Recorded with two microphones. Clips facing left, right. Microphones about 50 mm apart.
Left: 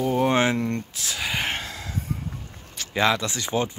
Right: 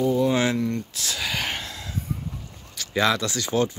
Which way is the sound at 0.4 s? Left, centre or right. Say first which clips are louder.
Left 1 dB; left.